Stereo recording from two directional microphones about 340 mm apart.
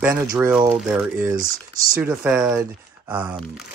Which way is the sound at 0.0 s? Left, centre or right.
Centre.